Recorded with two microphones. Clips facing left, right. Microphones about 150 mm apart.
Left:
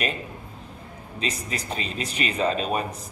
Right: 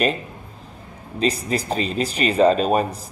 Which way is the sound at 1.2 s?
35° right (ahead or behind).